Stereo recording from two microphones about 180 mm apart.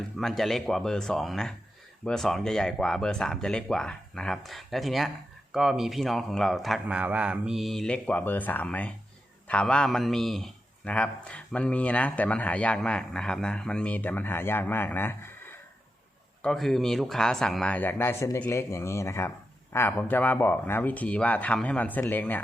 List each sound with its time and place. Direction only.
0.2 s a man's voice: centre (ahead or behind)